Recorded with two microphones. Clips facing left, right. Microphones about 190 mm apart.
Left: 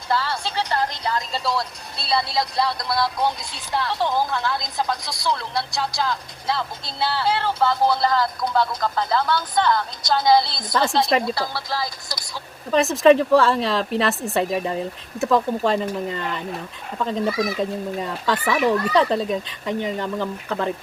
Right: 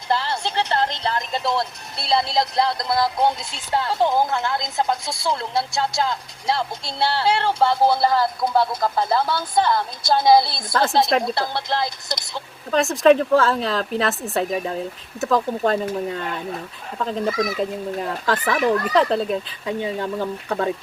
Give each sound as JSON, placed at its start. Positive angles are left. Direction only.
{"t": 0.1, "sound": "speech", "side_deg": -25}
{"t": 10.7, "sound": "speech", "side_deg": 0}
{"t": 12.0, "sound": "speech", "side_deg": -20}
{"t": 12.7, "sound": "speech", "side_deg": 0}